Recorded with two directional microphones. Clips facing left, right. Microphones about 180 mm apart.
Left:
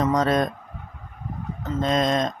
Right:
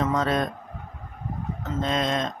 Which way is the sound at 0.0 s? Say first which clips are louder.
Left 3 dB; 40° left (ahead or behind).